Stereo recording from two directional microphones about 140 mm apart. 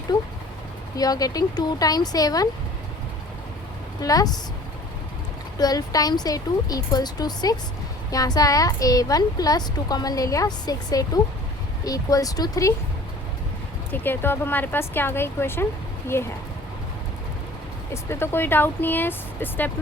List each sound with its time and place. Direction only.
0.9 s a woman's voice: 25° left (ahead or behind)
4.0 s a woman's voice: 25° left (ahead or behind)
5.5 s a woman's voice: 25° left (ahead or behind)
13.9 s speech: 15° left (ahead or behind)
17.9 s speech: 20° left (ahead or behind)